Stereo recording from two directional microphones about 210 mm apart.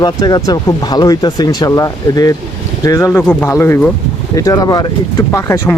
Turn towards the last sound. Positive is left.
turn(degrees=10)  # may be behind; listen again after turning